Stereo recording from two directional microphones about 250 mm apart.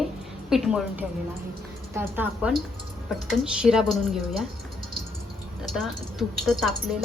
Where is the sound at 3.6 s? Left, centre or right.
Centre.